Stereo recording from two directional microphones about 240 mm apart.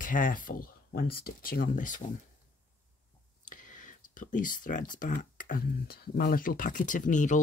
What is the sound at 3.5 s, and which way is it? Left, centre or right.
Speech, left.